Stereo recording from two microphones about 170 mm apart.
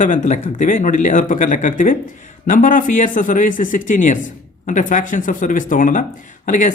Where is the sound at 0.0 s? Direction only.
50° left (ahead or behind).